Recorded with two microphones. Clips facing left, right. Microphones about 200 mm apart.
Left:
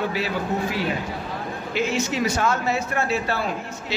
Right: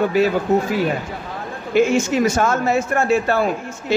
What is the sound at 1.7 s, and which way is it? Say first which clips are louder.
A man's voice: right 9 dB; 50° right (ahead or behind).